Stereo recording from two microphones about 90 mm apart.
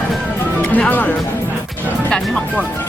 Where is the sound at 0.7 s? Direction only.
20° left (ahead or behind).